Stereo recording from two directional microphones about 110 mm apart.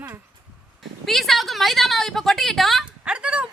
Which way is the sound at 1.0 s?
Centre (ahead or behind).